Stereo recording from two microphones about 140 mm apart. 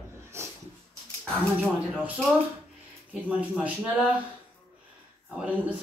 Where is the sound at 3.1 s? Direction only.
5° right (ahead or behind).